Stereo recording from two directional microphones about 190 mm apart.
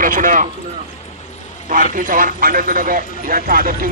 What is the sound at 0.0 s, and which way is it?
Speech, 45° right (ahead or behind).